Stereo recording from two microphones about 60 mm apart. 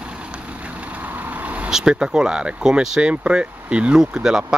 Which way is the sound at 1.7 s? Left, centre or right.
Centre.